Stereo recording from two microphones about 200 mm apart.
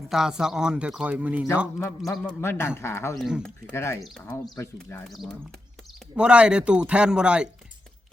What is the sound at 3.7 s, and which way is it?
A man's voice, 10° left (ahead or behind).